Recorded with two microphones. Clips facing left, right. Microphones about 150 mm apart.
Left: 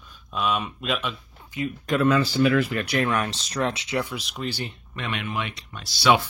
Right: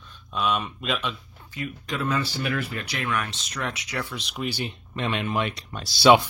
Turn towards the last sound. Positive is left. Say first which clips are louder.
# right 4 dB
turn(degrees=-25)  # may be behind; listen again after turning